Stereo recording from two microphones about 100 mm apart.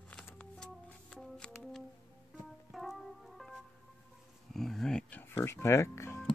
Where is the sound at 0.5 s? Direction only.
5° left (ahead or behind).